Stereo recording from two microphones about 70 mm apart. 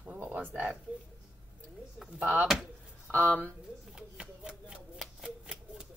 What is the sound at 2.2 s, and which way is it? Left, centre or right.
Speech, right.